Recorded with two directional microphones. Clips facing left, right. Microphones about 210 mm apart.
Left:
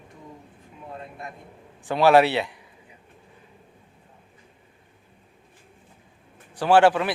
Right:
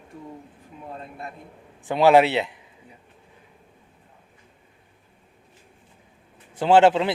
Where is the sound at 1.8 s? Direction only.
20° right (ahead or behind).